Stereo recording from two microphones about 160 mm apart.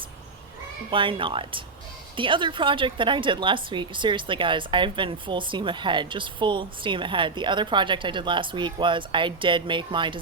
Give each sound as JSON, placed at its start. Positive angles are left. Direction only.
{"t": 0.9, "sound": "a woman's voice", "side_deg": -30}